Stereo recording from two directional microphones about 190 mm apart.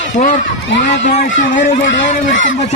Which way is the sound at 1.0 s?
40° left (ahead or behind).